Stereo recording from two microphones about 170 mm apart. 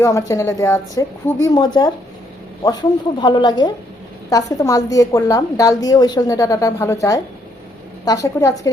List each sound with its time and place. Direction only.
0.0 s a woman's voice: 20° left (ahead or behind)
3.2 s a woman's voice: 25° left (ahead or behind)